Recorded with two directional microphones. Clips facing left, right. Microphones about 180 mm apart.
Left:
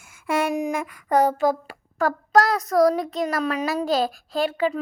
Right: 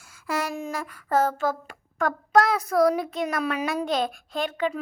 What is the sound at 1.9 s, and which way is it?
Child singing, centre (ahead or behind).